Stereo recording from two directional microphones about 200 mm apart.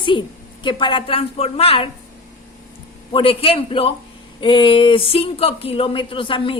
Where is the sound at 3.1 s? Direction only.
25° left (ahead or behind).